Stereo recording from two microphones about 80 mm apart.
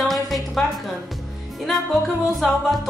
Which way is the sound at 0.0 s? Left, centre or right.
Centre.